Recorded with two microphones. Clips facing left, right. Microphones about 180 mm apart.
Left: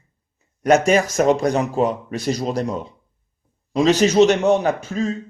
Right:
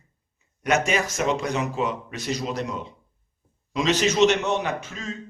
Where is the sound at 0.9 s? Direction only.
40° left (ahead or behind).